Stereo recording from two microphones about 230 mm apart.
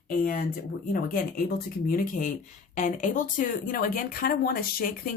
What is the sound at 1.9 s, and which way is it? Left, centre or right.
Speech, left.